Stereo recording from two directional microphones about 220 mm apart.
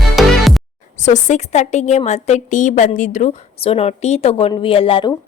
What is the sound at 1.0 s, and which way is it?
A woman's voice, 35° left (ahead or behind).